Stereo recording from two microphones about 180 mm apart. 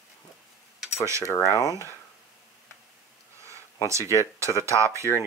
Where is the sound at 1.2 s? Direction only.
15° left (ahead or behind).